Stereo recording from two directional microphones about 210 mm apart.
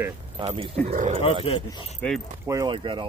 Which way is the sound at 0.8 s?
35° right (ahead or behind).